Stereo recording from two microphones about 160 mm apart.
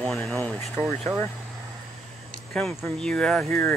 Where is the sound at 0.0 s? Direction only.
5° left (ahead or behind).